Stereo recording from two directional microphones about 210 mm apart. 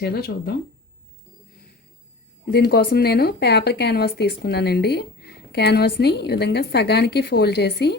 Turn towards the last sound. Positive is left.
turn(degrees=50)  # may be behind; listen again after turning